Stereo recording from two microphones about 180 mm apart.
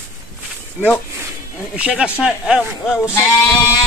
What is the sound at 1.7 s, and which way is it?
Speech, 5° right (ahead or behind).